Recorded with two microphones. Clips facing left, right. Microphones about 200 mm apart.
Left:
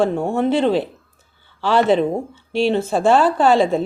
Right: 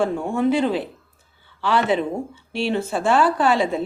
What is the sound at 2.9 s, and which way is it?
Speech, 35° left (ahead or behind).